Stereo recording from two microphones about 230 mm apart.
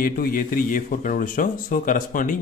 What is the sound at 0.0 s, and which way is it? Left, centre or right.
Speech, left.